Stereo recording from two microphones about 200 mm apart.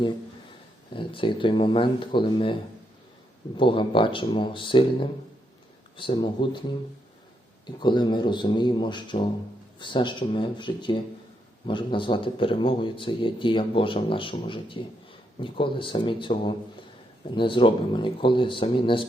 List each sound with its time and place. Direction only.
0.9 s a man's voice: 25° left (ahead or behind)
3.6 s a man's voice: 25° left (ahead or behind)
7.8 s a man's voice: 20° left (ahead or behind)